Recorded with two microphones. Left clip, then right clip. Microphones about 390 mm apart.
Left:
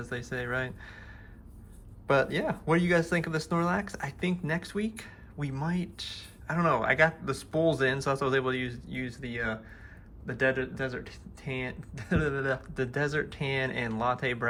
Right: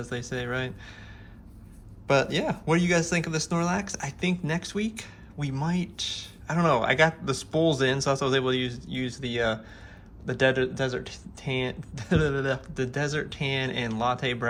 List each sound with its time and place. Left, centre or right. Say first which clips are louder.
0.0 s speech: right 2 dB; centre
2.0 s speech: right 2 dB; centre